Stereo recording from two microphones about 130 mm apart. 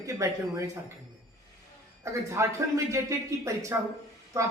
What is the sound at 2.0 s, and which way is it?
A woman's voice, 20° right (ahead or behind).